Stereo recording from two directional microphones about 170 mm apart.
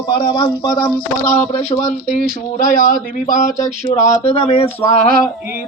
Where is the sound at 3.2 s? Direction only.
50° left (ahead or behind).